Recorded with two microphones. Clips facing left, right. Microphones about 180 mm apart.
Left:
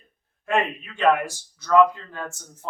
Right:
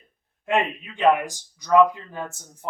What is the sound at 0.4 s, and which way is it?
Speech, 20° right (ahead or behind).